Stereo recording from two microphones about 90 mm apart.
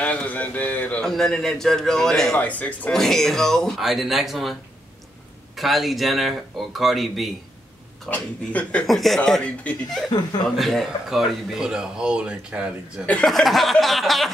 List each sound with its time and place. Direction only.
0.0 s a man's voice: 15° left (ahead or behind)
1.0 s speech: 5° left (ahead or behind)
2.3 s a man's voice: 15° left (ahead or behind)
3.0 s speech: 5° left (ahead or behind)
5.6 s speech: centre (ahead or behind)
8.1 s a man's voice: 15° left (ahead or behind)
8.8 s speech: centre (ahead or behind)
9.4 s a man's voice: 15° left (ahead or behind)
10.6 s speech: centre (ahead or behind)
13.0 s a man's voice: 15° left (ahead or behind)
13.3 s speech: centre (ahead or behind)